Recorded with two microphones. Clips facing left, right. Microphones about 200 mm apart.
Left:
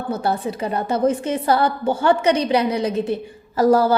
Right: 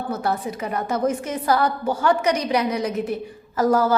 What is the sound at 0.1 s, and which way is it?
A woman's voice, 30° left (ahead or behind).